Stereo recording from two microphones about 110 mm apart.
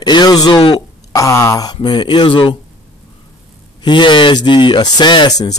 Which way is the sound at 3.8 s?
45° left (ahead or behind).